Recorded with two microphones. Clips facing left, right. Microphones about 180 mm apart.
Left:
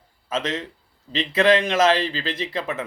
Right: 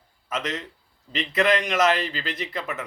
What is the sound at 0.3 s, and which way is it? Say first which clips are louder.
Speech: left 4 dB; 25° left (ahead or behind).